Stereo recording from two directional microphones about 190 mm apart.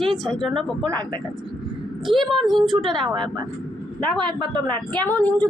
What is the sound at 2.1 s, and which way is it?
Speech, 30° right (ahead or behind).